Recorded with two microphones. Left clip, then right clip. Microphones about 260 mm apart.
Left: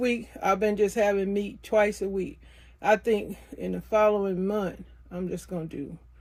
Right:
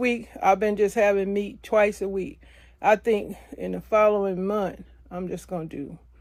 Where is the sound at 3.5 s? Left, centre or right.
Centre.